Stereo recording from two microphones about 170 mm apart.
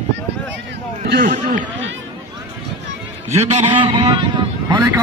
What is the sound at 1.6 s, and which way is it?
Run, 90° right.